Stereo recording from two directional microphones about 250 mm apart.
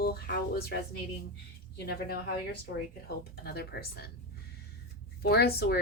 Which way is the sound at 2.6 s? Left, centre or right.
Left.